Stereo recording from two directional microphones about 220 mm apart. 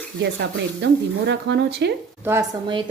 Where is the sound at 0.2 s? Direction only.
50° right (ahead or behind).